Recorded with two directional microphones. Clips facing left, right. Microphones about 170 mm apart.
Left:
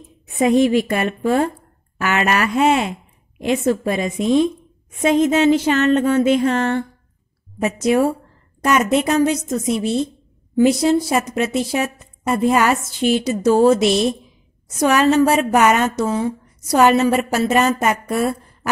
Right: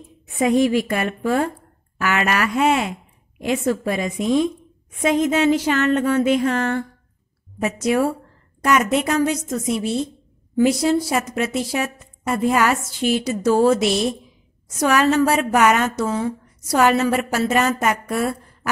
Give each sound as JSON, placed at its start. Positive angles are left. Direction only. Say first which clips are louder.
{"t": 0.4, "sound": "a woman's voice", "louder": "left 2 dB", "side_deg": 25}